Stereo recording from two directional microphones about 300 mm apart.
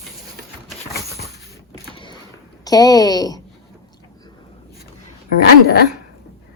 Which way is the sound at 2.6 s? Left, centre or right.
Centre.